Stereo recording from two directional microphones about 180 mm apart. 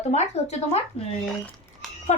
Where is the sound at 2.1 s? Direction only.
40° left (ahead or behind).